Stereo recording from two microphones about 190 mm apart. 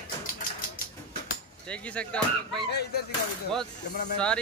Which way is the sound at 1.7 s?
5° left (ahead or behind).